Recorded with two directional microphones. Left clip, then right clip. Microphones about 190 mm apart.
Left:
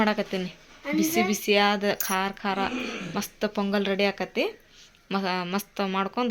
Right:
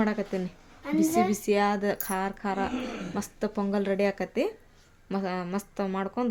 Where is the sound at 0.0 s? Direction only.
5° right (ahead or behind).